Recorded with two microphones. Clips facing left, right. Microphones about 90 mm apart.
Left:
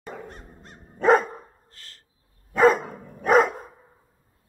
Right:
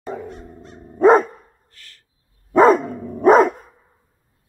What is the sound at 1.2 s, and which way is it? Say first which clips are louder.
Dog: right 1 dB; 30° left (ahead or behind).